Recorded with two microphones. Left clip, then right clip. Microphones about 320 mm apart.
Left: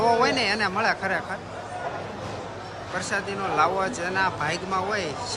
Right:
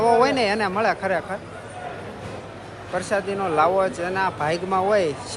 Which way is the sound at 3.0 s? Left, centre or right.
Centre.